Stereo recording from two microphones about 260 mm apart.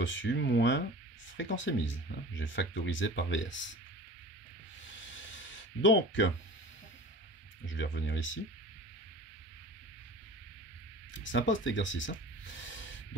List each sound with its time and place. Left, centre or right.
0.0 s speech: left
5.1 s a sound: left
7.6 s speech: left
11.2 s speech: left
12.6 s owl: left